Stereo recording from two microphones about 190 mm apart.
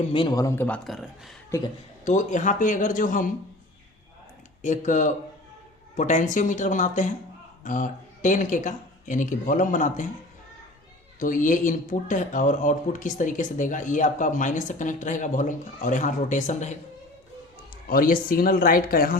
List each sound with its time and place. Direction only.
0.1 s speech: 25° left (ahead or behind)
0.9 s speech: centre (ahead or behind)
1.5 s speech: 15° left (ahead or behind)
2.0 s speech: 40° left (ahead or behind)
4.6 s speech: 40° left (ahead or behind)
11.2 s speech: 45° left (ahead or behind)
17.8 s speech: 50° left (ahead or behind)